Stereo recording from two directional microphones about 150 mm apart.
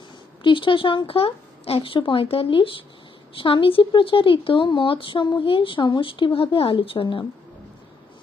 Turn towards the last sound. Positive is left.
turn(degrees=35)  # may be behind; listen again after turning